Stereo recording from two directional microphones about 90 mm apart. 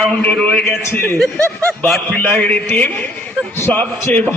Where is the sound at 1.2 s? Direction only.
5° left (ahead or behind).